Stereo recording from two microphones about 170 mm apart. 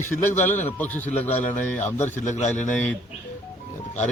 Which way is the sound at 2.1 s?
45° left (ahead or behind).